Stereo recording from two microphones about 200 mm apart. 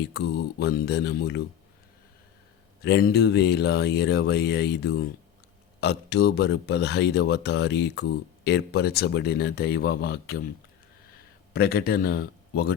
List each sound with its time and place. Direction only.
0.1 s speech: 55° left (ahead or behind)
2.8 s speech: 55° left (ahead or behind)
11.5 s speech: 50° left (ahead or behind)